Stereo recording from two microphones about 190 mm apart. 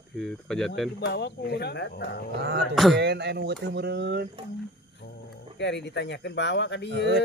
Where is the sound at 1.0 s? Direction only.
60° left (ahead or behind).